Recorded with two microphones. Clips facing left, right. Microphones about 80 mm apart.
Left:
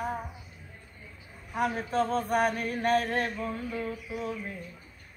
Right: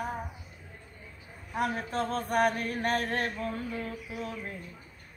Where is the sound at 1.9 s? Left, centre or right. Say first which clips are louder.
Left 4 dB; left.